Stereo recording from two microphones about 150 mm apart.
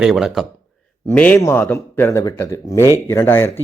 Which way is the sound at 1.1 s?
10° left (ahead or behind).